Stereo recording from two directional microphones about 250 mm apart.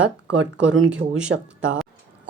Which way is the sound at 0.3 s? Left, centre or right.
Right.